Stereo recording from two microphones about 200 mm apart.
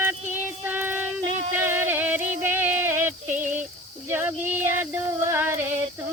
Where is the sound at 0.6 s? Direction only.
10° right (ahead or behind).